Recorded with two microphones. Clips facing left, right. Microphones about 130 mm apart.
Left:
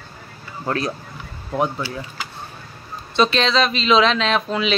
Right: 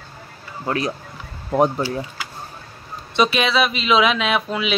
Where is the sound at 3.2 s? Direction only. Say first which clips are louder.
Even; 10° right (ahead or behind).